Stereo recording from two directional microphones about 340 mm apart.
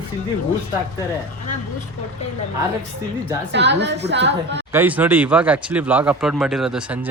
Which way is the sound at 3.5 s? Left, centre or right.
Right.